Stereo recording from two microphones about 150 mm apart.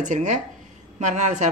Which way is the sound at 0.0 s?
55° right (ahead or behind).